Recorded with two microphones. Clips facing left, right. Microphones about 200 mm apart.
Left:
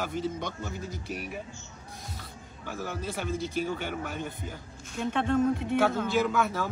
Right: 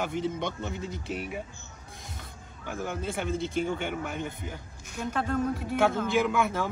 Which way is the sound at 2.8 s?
20° right (ahead or behind).